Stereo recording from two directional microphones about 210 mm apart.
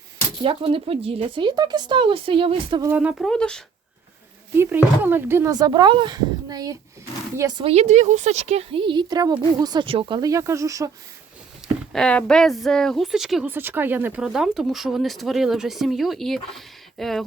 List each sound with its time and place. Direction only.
0.4 s a woman's voice: 25° right (ahead or behind)
2.9 s a woman's voice: 5° right (ahead or behind)
4.5 s a woman's voice: 10° right (ahead or behind)
11.9 s a woman's voice: 5° left (ahead or behind)